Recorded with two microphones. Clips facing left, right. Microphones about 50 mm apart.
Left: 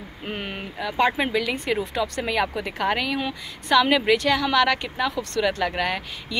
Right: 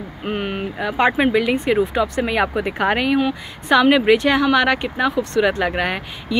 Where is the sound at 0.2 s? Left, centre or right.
Centre.